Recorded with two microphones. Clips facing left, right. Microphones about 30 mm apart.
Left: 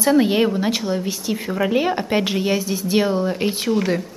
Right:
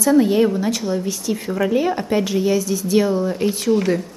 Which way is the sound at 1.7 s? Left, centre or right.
Left.